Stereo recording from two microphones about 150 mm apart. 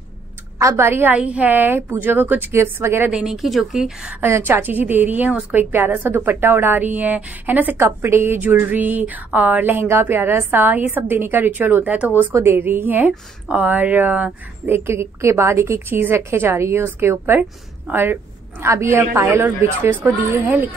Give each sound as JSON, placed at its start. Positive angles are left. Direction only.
{"t": 0.6, "sound": "a woman's voice", "side_deg": -20}
{"t": 4.2, "sound": "a woman's voice", "side_deg": -15}